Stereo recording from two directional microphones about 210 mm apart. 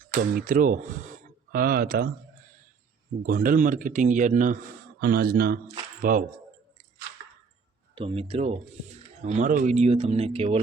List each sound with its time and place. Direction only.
0.1 s speech: 40° right (ahead or behind)
3.2 s speech: 40° right (ahead or behind)
7.9 s speech: 25° right (ahead or behind)